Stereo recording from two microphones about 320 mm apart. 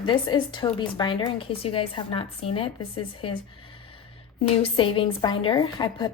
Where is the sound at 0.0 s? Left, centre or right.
Centre.